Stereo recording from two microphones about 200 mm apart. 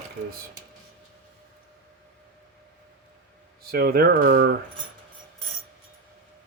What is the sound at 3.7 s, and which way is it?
Coin, 50° right (ahead or behind).